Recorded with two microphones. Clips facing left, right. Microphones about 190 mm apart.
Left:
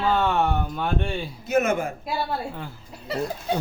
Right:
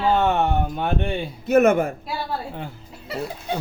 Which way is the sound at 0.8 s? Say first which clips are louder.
Right 2 dB; 60° right (ahead or behind).